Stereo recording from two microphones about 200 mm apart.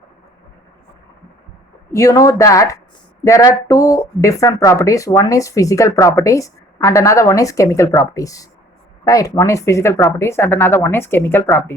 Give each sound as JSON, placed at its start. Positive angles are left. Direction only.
{"t": 1.9, "sound": "speech", "side_deg": 15}